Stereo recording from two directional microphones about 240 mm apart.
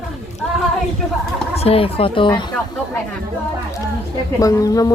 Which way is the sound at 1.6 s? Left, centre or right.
Left.